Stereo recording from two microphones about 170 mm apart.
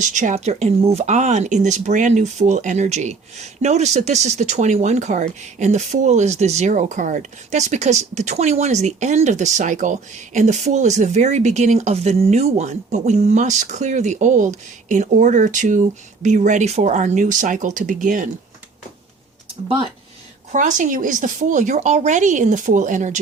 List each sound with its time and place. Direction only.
0.0 s speech: 45° right (ahead or behind)
20.5 s speech: 50° right (ahead or behind)